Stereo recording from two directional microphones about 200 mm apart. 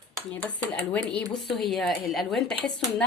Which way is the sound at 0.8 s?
5° left (ahead or behind).